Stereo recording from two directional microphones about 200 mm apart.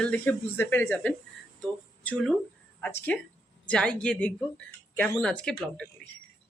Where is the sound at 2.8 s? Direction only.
10° left (ahead or behind).